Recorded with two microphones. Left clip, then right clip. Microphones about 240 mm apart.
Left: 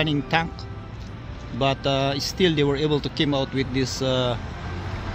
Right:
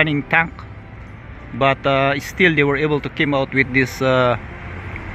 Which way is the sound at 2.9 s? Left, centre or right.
Centre.